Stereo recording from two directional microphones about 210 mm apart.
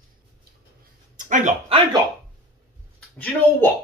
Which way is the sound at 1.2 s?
35° right (ahead or behind).